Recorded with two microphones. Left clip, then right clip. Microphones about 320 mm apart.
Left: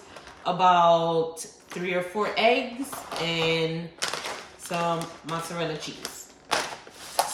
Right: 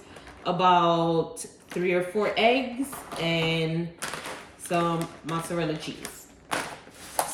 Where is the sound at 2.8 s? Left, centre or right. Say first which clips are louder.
Right 2 dB; left.